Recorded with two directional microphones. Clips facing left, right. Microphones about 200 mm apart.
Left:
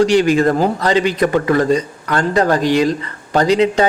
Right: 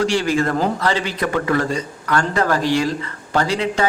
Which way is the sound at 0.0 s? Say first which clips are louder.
Left 6 dB; 20° left (ahead or behind).